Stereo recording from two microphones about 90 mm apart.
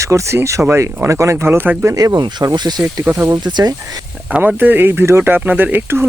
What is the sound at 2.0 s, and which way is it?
Speech, 45° right (ahead or behind).